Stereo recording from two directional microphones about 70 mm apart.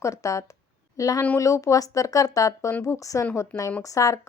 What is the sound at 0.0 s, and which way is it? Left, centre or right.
Speech, left.